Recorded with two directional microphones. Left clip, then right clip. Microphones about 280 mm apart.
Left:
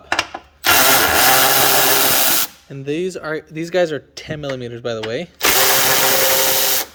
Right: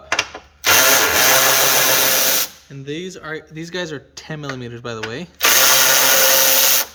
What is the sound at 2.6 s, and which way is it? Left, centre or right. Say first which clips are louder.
Speech: left 6 dB; centre.